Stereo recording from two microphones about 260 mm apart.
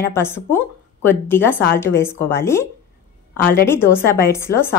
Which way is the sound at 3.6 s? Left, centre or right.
Centre.